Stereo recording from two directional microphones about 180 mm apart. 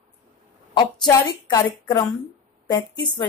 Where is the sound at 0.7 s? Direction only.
20° left (ahead or behind).